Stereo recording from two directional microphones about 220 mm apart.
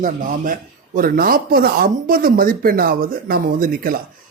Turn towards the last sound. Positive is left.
turn(degrees=-40)  # may be behind; listen again after turning